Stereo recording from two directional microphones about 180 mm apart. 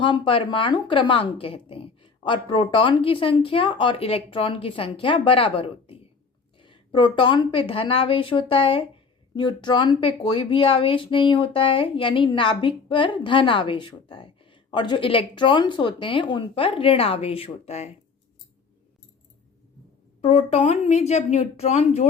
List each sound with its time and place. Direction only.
0.0 s speech: 30° left (ahead or behind)
20.2 s a woman's voice: 35° left (ahead or behind)